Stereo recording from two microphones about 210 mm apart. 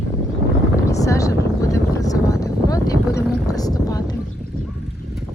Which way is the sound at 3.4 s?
15° left (ahead or behind).